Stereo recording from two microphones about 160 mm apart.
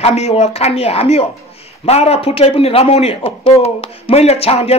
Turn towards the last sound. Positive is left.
turn(degrees=40)  # may be behind; listen again after turning